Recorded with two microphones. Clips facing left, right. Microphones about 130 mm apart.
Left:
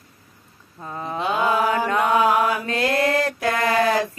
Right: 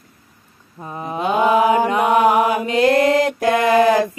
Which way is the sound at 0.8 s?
15° right (ahead or behind).